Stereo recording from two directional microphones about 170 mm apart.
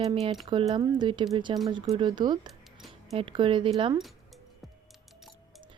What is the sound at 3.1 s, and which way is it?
Speech, 30° right (ahead or behind).